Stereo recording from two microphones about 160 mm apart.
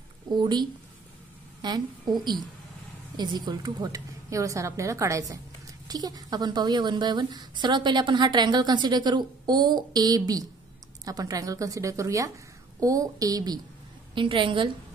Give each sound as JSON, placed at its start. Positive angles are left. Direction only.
{"t": 0.3, "sound": "a woman's voice", "side_deg": -25}